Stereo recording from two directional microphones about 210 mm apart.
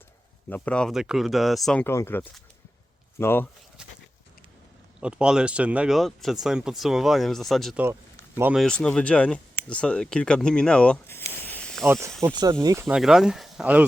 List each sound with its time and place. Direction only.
0.5 s speech: 5° left (ahead or behind)
4.9 s speech: 5° right (ahead or behind)
8.6 s speech: 5° left (ahead or behind)
11.9 s speech: 15° right (ahead or behind)
13.0 s speech: centre (ahead or behind)